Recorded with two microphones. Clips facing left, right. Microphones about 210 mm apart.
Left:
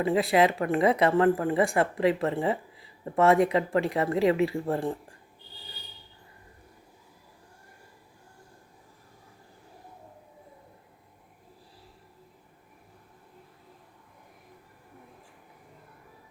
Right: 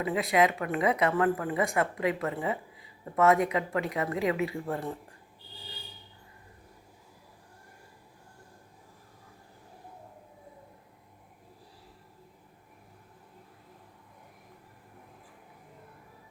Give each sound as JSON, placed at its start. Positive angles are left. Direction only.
{"t": 0.0, "sound": "speech", "side_deg": 30}